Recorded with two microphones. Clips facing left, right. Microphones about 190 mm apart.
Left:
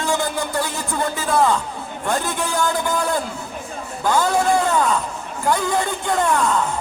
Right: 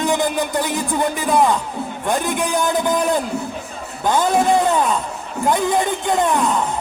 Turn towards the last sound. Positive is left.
turn(degrees=-20)  # may be behind; listen again after turning